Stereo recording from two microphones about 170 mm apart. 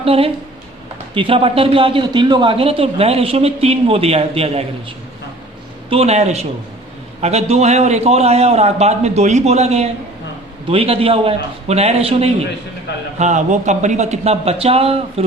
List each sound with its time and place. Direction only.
0.0 s a woman's voice: 35° right (ahead or behind)
5.9 s a woman's voice: 40° right (ahead or behind)